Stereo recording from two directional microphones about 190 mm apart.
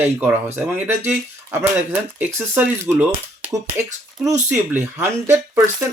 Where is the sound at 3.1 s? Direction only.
30° right (ahead or behind).